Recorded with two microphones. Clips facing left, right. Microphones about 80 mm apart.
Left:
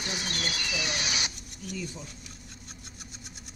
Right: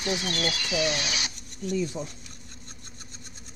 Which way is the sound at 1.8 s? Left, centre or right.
Right.